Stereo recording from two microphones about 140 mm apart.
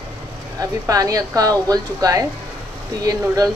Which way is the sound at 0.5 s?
25° right (ahead or behind).